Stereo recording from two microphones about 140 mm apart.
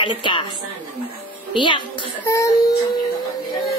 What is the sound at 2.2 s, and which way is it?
Speech, 20° left (ahead or behind).